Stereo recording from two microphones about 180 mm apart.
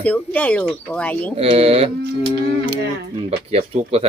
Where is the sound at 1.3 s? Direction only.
35° right (ahead or behind).